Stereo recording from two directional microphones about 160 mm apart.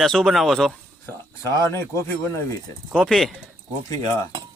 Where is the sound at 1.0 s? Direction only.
15° left (ahead or behind).